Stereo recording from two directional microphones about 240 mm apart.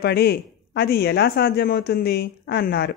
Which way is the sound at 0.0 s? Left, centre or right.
Left.